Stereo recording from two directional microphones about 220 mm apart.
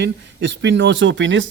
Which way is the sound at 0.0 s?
50° right (ahead or behind).